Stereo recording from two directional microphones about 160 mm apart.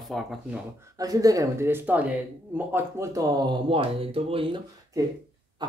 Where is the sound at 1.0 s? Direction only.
20° right (ahead or behind).